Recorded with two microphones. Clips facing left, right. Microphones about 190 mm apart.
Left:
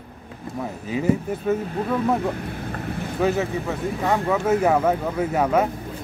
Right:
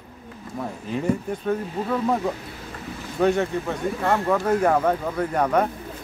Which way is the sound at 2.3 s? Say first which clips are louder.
Left 7 dB; 55° left (ahead or behind).